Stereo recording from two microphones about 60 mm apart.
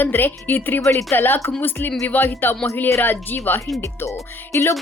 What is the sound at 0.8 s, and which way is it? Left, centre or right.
Speech, left.